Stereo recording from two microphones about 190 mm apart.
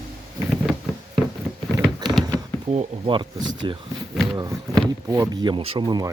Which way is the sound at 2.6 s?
30° right (ahead or behind).